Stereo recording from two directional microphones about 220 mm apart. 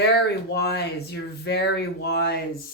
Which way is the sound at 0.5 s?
50° left (ahead or behind).